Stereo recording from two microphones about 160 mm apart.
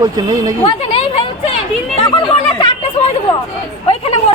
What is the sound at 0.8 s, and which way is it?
Chatter, 40° left (ahead or behind).